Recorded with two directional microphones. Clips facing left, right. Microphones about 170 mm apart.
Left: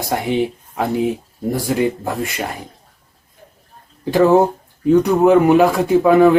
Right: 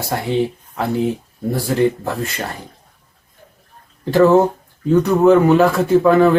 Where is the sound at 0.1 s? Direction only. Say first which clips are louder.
Even; 15° left (ahead or behind).